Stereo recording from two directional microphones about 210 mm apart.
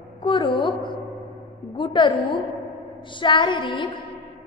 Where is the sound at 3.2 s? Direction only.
20° left (ahead or behind).